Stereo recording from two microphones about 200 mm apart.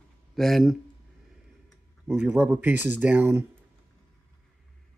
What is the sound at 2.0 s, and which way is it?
Speech, 10° right (ahead or behind).